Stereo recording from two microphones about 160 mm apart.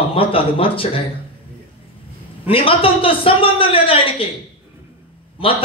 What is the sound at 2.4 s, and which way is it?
Speech, 35° left (ahead or behind).